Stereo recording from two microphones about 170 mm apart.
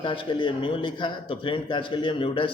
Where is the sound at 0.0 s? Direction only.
30° left (ahead or behind).